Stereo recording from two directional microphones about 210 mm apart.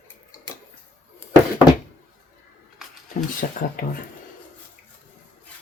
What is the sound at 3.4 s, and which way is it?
Speech, 35° left (ahead or behind).